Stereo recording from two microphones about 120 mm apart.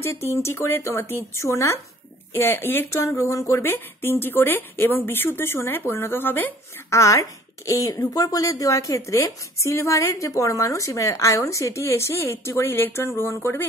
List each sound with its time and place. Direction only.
0.0 s speech: 20° left (ahead or behind)